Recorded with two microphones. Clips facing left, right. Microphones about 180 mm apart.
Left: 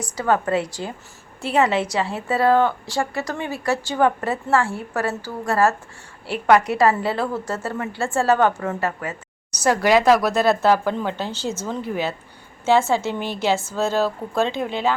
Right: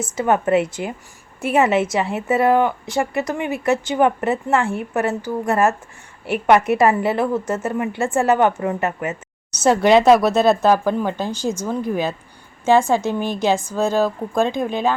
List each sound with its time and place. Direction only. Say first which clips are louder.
0.0 s a woman's voice: right 2 dB; 20° right (ahead or behind)